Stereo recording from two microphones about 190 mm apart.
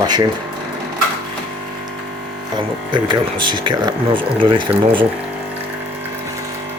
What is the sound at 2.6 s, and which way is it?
Speech, 25° right (ahead or behind).